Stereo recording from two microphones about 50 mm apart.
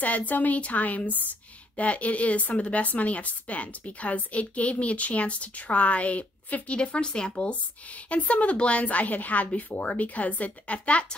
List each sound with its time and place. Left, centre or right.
0.0 s a woman's voice: left
7.3 s a woman's voice: left